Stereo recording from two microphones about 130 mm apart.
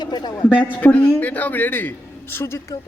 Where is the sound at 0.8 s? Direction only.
10° left (ahead or behind).